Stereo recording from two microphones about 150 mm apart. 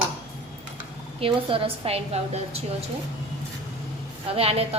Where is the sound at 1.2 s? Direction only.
40° right (ahead or behind).